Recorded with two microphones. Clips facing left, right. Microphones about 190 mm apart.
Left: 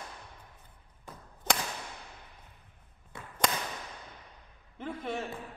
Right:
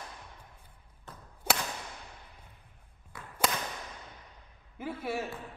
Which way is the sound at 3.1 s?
25° left (ahead or behind).